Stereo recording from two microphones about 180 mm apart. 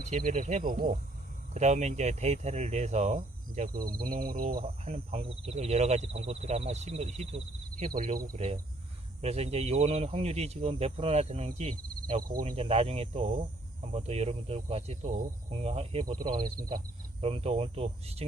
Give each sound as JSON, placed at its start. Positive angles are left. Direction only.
{"t": 0.0, "sound": "speech", "side_deg": -45}
{"t": 4.6, "sound": "speech", "side_deg": -35}
{"t": 9.2, "sound": "speech", "side_deg": -35}
{"t": 12.3, "sound": "speech", "side_deg": -45}
{"t": 12.5, "sound": "speech", "side_deg": -35}
{"t": 17.2, "sound": "speech", "side_deg": -35}